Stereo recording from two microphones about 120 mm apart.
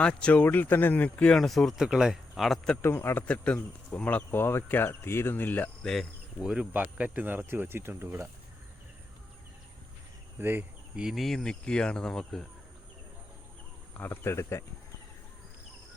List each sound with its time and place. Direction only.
0.0 s speech: 10° left (ahead or behind)
2.8 s speech: 20° left (ahead or behind)
5.9 s speech: centre (ahead or behind); by 8.3 s 20° right (ahead or behind)
10.3 s speech: 15° right (ahead or behind); by 12.5 s 5° left (ahead or behind)
13.9 s speech: 20° left (ahead or behind)